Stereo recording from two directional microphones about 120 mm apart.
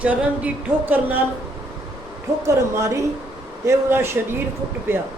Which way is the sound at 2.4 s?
25° right (ahead or behind).